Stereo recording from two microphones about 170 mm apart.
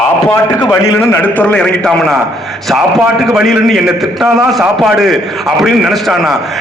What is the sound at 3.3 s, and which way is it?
A man's voice, centre (ahead or behind).